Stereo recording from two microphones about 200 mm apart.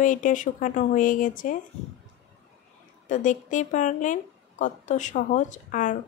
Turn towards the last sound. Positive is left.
turn(degrees=40)  # may be behind; listen again after turning